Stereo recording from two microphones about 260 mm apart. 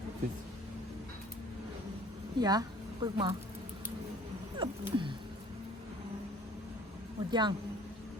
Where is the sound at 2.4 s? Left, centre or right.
Centre.